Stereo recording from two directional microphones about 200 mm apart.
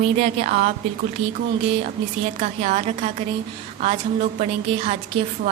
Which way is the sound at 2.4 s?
35° right (ahead or behind).